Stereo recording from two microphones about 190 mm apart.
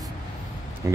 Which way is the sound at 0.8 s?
15° right (ahead or behind).